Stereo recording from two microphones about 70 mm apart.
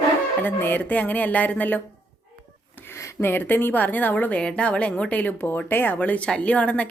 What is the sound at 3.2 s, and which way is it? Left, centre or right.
A woman's voice, left.